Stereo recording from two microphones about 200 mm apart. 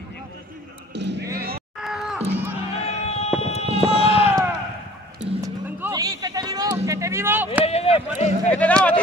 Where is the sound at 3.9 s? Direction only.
30° left (ahead or behind).